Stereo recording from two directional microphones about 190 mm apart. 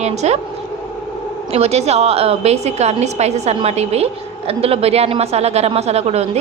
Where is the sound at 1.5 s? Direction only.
35° right (ahead or behind).